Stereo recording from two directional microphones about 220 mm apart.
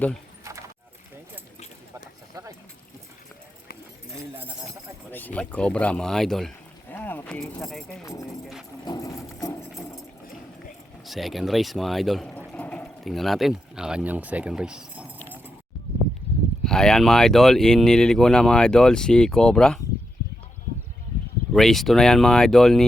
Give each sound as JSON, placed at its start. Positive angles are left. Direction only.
{"t": 1.5, "sound": "a sound", "side_deg": 30}
{"t": 2.3, "sound": "a sound", "side_deg": -15}
{"t": 5.1, "sound": "speech", "side_deg": 5}
{"t": 8.0, "sound": "speech", "side_deg": 15}
{"t": 8.8, "sound": "a sound", "side_deg": 15}
{"t": 9.4, "sound": "clip-clop", "side_deg": 15}
{"t": 11.0, "sound": "speech", "side_deg": 0}
{"t": 16.6, "sound": "speech", "side_deg": 5}
{"t": 21.5, "sound": "speech", "side_deg": 0}